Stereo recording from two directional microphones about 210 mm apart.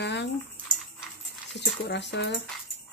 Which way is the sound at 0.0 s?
55° left (ahead or behind).